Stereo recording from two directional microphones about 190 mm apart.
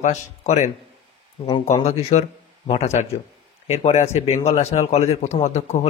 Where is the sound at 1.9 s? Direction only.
35° left (ahead or behind).